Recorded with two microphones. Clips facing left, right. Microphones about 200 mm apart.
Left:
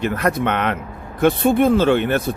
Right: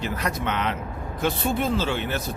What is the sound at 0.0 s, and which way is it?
Speech, 55° left (ahead or behind).